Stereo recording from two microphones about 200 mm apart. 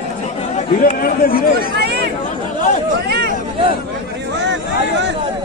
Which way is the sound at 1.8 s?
55° right (ahead or behind).